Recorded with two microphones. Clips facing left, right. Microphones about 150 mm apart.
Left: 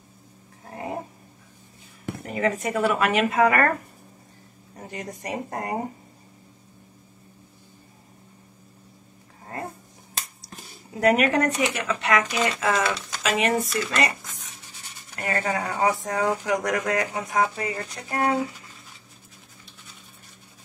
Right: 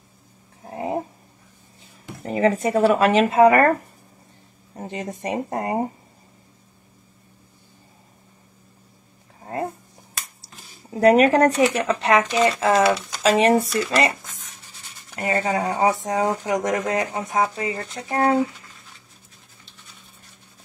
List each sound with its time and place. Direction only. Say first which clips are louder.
0.7 s dog: right 6 dB; 25° right (ahead or behind)
2.2 s speech: right 6 dB; 30° right (ahead or behind)
4.7 s speech: right 5 dB; 25° right (ahead or behind)
10.9 s speech: right 6 dB; 30° right (ahead or behind)
15.1 s speech: right 4 dB; 20° right (ahead or behind)